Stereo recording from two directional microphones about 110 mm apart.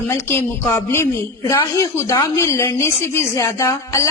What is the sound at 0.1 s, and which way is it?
A woman's voice, 25° left (ahead or behind).